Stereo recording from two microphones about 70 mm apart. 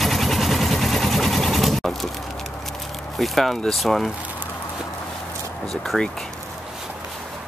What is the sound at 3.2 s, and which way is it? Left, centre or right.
Speech, centre.